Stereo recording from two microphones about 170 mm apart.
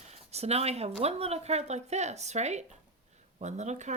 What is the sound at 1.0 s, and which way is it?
Speech, 40° right (ahead or behind).